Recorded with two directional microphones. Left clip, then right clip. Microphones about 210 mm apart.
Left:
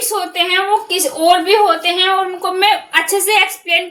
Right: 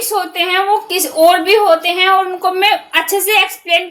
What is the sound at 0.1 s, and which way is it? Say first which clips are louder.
Speech: right 1 dB; centre (ahead or behind).